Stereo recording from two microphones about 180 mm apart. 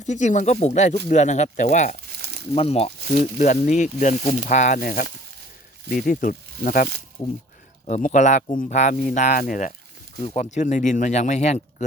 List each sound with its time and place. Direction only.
0.0 s speech: 40° left (ahead or behind)
2.1 s crumpling: 60° right (ahead or behind)
2.6 s speech: 35° left (ahead or behind)
7.9 s speech: 40° left (ahead or behind)